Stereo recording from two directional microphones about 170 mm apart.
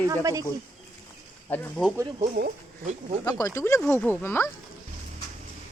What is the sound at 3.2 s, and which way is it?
Speech, 20° left (ahead or behind).